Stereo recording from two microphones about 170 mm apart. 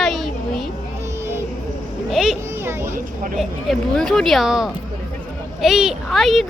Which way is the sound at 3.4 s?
Centre (ahead or behind).